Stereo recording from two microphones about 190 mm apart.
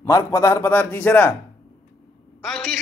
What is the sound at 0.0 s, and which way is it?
A man's voice, 20° left (ahead or behind).